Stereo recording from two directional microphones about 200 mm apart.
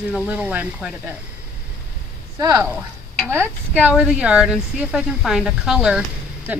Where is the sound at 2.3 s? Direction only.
15° right (ahead or behind).